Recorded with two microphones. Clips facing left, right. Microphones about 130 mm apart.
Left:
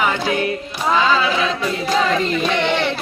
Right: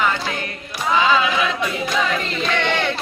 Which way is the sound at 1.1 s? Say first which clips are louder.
Left 1 dB; 35° left (ahead or behind).